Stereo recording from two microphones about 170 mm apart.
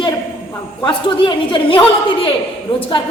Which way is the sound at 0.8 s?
30° left (ahead or behind).